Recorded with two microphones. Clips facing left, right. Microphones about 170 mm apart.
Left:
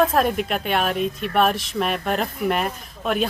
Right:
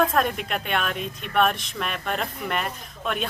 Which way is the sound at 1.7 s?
40° left (ahead or behind).